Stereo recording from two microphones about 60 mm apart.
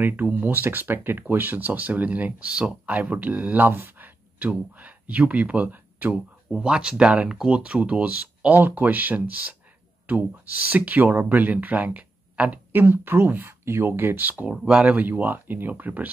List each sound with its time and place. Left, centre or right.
0.0 s speech: right
3.6 s speech: right
4.0 s a sound: right
5.2 s speech: right
6.5 s speech: centre
14.5 s speech: centre
14.9 s speech: right